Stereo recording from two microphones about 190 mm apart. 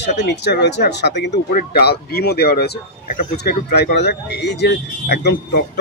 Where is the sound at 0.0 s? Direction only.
65° left (ahead or behind).